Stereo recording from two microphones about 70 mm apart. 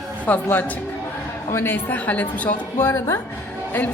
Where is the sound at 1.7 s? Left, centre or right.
Left.